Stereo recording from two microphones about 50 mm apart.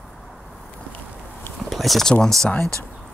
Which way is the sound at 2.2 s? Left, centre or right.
Centre.